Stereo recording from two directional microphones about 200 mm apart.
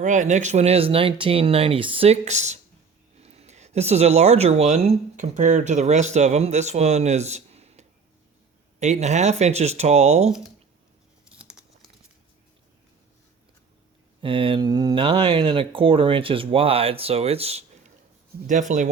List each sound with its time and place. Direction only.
0.0 s speech: 40° right (ahead or behind)
11.3 s crumpling: 5° right (ahead or behind)
14.2 s speech: 25° right (ahead or behind)